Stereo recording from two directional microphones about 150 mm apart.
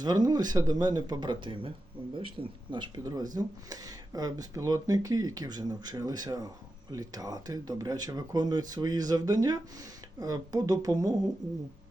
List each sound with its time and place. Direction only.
0.0 s speech: 25° right (ahead or behind)